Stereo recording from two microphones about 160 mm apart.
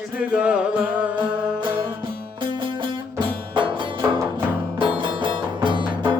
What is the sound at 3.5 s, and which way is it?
Music, 30° right (ahead or behind).